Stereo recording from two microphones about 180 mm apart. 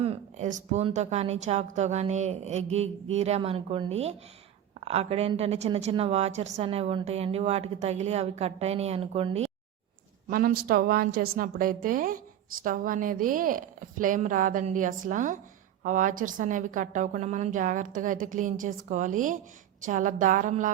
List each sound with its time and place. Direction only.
0.0 s a woman's voice: 35° right (ahead or behind)
10.2 s a woman's voice: 55° right (ahead or behind)